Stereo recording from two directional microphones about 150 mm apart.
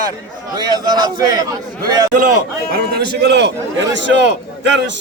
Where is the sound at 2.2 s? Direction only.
75° right (ahead or behind).